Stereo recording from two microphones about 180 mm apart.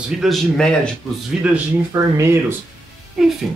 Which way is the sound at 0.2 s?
Centre (ahead or behind).